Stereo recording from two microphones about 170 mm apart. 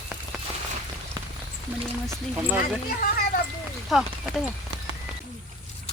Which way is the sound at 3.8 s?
Centre (ahead or behind).